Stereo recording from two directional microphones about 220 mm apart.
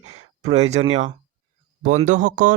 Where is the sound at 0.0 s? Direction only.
30° right (ahead or behind).